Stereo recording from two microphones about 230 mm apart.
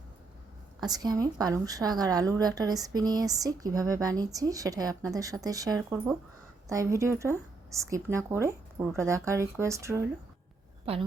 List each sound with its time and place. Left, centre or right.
0.8 s a woman's voice: centre